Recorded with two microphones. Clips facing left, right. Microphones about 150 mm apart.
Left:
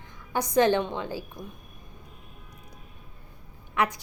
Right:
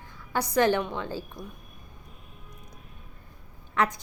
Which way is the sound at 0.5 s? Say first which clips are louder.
Left 2 dB; 20° left (ahead or behind).